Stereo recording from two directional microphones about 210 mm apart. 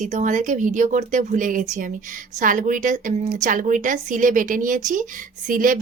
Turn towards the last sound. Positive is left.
turn(degrees=-40)  # may be behind; listen again after turning